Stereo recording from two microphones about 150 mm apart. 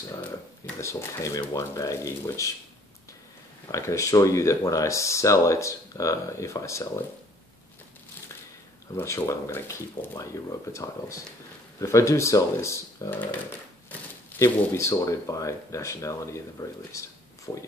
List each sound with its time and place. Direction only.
0.7 s speech: 20° left (ahead or behind)
3.7 s speech: 20° left (ahead or behind)
8.9 s speech: 20° left (ahead or behind)
14.4 s speech: 20° left (ahead or behind)